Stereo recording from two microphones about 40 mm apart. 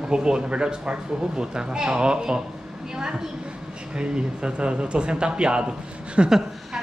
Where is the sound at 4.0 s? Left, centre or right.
Right.